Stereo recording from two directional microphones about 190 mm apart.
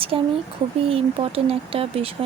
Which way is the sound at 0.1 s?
30° right (ahead or behind).